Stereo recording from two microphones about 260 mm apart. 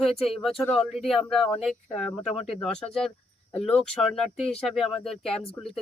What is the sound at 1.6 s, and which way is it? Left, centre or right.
Speech, centre.